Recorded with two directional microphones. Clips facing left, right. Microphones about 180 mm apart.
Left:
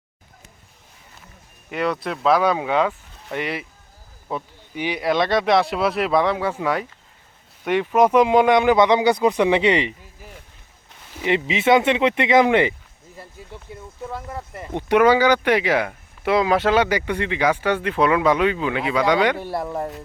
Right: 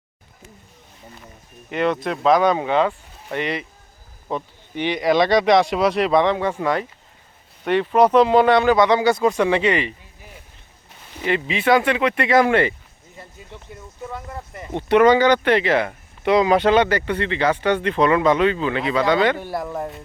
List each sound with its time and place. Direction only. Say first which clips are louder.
1.7 s speech: right 3 dB; 5° left (ahead or behind); by 9.9 s 20° left (ahead or behind)
11.3 s speech: left 1 dB; 20° left (ahead or behind)
14.8 s speech: right 1 dB; 10° left (ahead or behind)
19.4 s speech: left 1 dB; centre (ahead or behind)